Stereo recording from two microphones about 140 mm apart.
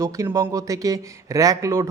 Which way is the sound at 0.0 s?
25° right (ahead or behind).